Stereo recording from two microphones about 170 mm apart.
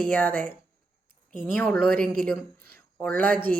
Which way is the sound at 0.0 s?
10° left (ahead or behind).